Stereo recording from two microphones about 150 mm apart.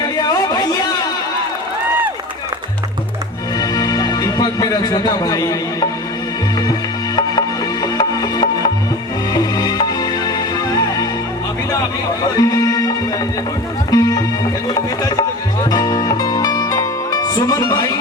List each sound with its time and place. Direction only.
0.0 s a sound: 25° left (ahead or behind)
3.6 s music: 25° left (ahead or behind)
7.2 s music: 25° left (ahead or behind)
12.4 s music: 25° left (ahead or behind)
13.9 s music: 25° left (ahead or behind)
15.7 s music: 25° left (ahead or behind)